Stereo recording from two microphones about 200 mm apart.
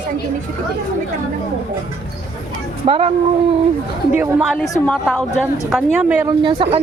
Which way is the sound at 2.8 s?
30° right (ahead or behind).